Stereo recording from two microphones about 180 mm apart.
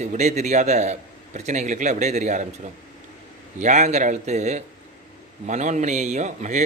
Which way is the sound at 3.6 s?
40° right (ahead or behind).